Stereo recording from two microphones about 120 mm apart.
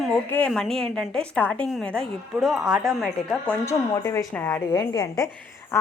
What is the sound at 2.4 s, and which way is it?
Speech, 5° right (ahead or behind).